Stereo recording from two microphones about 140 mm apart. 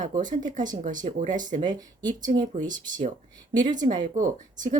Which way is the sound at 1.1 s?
65° right (ahead or behind).